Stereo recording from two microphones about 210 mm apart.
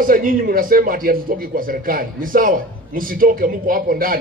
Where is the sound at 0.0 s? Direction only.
40° right (ahead or behind).